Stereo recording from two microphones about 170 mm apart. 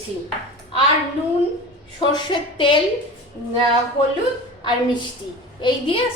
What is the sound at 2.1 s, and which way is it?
Speech, 30° left (ahead or behind).